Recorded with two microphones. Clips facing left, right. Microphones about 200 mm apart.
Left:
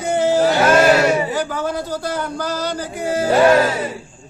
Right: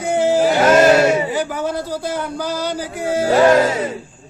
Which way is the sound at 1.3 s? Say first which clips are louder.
Right 1 dB; 10° right (ahead or behind).